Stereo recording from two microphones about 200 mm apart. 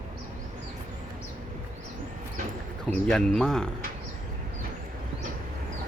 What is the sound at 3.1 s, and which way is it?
Speech, 5° left (ahead or behind).